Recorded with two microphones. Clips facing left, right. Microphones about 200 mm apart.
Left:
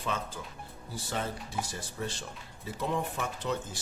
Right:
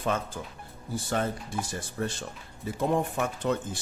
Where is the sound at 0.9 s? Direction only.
50° right (ahead or behind).